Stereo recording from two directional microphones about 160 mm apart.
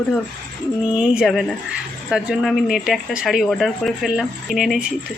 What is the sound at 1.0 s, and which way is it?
Speech, centre (ahead or behind).